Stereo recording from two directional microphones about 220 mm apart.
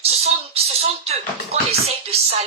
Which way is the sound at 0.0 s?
25° right (ahead or behind).